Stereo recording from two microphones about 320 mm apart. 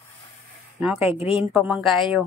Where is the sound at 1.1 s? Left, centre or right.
Centre.